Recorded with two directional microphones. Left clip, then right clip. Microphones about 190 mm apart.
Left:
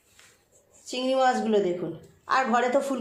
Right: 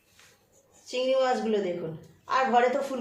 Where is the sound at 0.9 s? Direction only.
40° left (ahead or behind).